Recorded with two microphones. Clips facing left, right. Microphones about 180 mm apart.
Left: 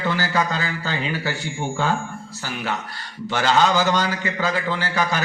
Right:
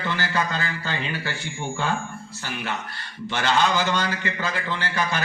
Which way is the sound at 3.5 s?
40° left (ahead or behind).